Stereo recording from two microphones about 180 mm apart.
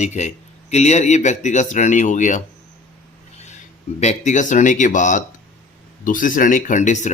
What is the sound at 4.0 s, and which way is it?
Speech, 40° left (ahead or behind).